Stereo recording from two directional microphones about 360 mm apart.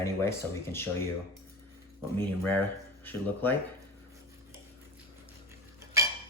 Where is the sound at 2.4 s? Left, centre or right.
Centre.